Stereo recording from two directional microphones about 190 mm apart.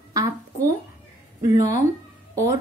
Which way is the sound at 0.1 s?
15° right (ahead or behind).